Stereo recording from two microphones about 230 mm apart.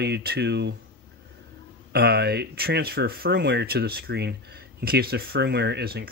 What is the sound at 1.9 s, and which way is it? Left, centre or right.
Speech, right.